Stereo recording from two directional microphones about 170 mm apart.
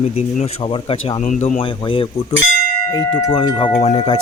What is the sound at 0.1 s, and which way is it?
Speech, 35° left (ahead or behind).